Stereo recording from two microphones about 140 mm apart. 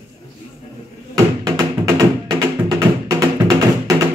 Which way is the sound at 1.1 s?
25° right (ahead or behind).